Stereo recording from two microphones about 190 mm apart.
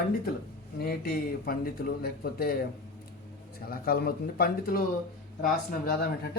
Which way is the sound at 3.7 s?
55° left (ahead or behind).